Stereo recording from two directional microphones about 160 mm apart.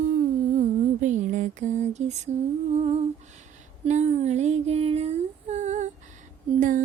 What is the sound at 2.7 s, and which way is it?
Humming, 40° right (ahead or behind).